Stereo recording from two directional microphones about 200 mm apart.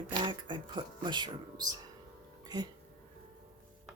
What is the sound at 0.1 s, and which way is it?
Speech, 25° right (ahead or behind).